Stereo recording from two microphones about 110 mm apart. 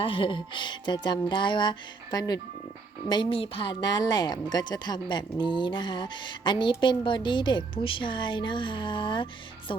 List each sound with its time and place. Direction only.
0.0 s speech: 50° left (ahead or behind)
3.1 s speech: 50° left (ahead or behind)